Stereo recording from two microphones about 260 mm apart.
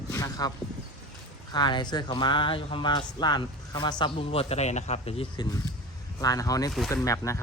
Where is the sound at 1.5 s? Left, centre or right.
Centre.